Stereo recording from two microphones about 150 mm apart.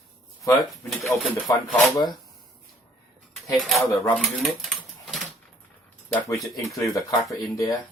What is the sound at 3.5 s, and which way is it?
Speech, centre (ahead or behind).